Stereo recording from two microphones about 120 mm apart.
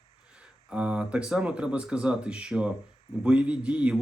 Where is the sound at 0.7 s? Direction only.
10° right (ahead or behind).